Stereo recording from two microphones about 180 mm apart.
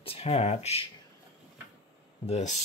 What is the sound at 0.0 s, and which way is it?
Speech, 35° left (ahead or behind).